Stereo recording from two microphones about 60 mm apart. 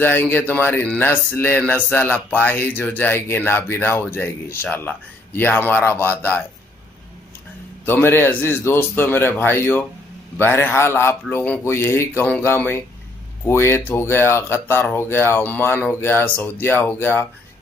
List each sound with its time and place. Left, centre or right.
0.0 s speech: left
7.8 s speech: left
10.3 s speech: left